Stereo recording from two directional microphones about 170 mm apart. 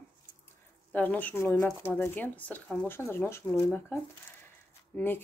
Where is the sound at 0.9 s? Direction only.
10° left (ahead or behind).